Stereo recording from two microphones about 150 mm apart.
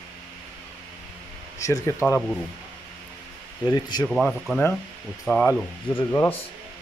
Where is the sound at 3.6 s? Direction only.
25° left (ahead or behind).